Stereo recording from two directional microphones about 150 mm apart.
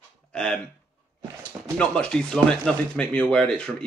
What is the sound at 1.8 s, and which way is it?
Speech, 5° left (ahead or behind).